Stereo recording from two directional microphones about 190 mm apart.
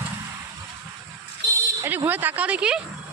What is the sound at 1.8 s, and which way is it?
Speech, 10° right (ahead or behind).